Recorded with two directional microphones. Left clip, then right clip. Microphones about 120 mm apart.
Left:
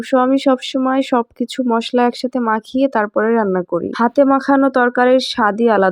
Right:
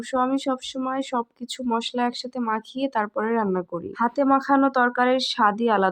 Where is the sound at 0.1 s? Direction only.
35° left (ahead or behind).